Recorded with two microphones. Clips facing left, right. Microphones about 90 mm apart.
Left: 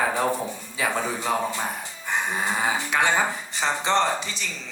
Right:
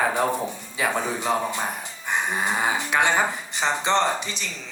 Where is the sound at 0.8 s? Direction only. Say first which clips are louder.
Right 1 dB; 20° right (ahead or behind).